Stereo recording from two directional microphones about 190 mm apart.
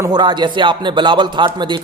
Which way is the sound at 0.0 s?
20° right (ahead or behind).